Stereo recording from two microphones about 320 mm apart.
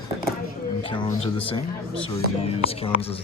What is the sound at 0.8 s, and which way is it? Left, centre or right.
Speech, centre.